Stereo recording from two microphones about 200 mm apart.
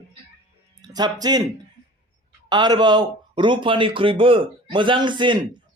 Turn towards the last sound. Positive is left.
turn(degrees=-25)  # may be behind; listen again after turning